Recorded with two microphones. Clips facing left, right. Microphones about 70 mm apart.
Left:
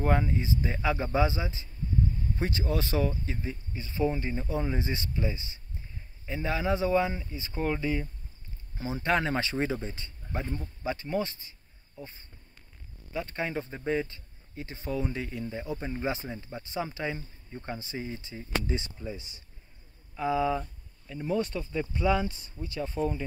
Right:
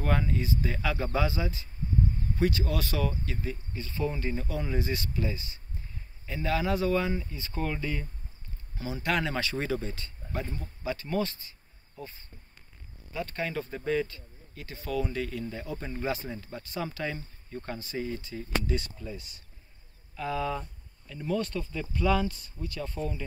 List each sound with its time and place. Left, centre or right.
0.0 s speech: left
12.0 s insect: left
13.1 s speech: left